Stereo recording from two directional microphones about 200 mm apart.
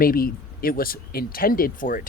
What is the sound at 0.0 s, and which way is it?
Speech, 45° left (ahead or behind).